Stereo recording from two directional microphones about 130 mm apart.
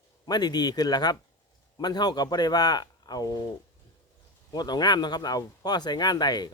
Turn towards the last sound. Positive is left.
turn(degrees=30)  # may be behind; listen again after turning